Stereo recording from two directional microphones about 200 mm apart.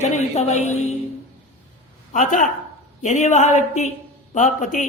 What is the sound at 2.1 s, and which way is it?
Speech, 40° left (ahead or behind).